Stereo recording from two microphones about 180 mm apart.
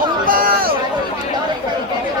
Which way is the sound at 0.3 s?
55° right (ahead or behind).